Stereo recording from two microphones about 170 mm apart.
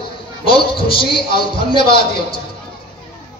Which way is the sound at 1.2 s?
65° left (ahead or behind).